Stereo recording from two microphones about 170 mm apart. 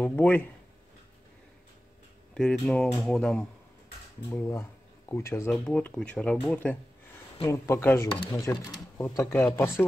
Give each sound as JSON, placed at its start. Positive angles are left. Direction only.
{"t": 0.0, "sound": "speech", "side_deg": 10}
{"t": 2.3, "sound": "speech", "side_deg": 5}
{"t": 4.3, "sound": "speech", "side_deg": 15}
{"t": 8.1, "sound": "speech", "side_deg": 25}